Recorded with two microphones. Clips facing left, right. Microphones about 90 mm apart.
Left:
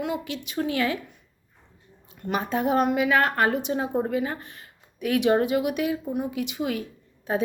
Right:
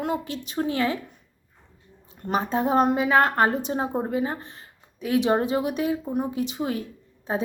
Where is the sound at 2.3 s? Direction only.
30° right (ahead or behind).